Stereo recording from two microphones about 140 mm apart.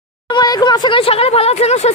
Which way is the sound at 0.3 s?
30° left (ahead or behind).